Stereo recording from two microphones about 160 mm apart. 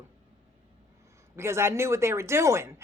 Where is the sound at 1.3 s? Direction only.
15° right (ahead or behind).